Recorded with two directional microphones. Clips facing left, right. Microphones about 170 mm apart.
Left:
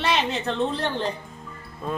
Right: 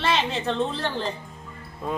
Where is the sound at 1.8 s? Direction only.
15° right (ahead or behind).